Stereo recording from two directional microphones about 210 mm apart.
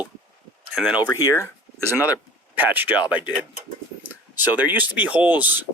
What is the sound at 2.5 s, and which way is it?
Speech, 10° right (ahead or behind).